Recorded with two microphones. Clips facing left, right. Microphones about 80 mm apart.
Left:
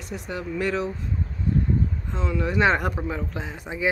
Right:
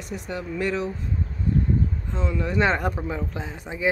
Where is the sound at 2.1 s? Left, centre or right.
Centre.